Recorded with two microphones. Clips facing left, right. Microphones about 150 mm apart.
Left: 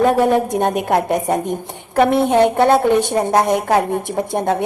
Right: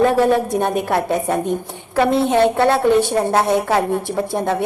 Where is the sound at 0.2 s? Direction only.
15° left (ahead or behind).